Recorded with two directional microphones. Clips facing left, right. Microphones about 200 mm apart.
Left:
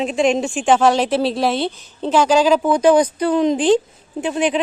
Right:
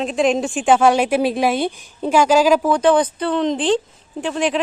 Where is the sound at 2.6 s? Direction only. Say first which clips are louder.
Left 2 dB; 10° left (ahead or behind).